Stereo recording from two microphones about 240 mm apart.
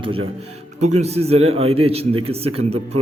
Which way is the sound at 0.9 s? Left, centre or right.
Right.